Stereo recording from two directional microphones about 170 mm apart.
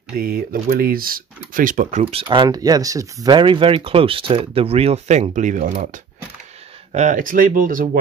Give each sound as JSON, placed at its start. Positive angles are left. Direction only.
{"t": 0.1, "sound": "speech", "side_deg": -60}
{"t": 6.9, "sound": "speech", "side_deg": -45}